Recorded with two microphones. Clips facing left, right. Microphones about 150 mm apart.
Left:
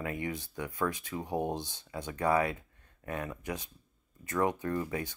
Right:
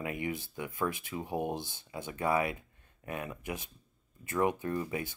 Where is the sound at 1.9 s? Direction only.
20° right (ahead or behind).